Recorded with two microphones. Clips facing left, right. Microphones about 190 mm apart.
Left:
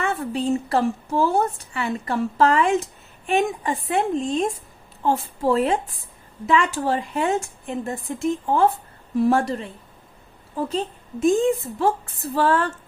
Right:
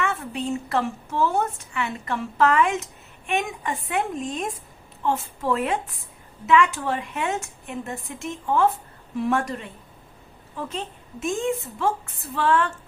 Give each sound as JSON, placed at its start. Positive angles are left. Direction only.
{"t": 0.0, "sound": "a woman's voice", "side_deg": 35}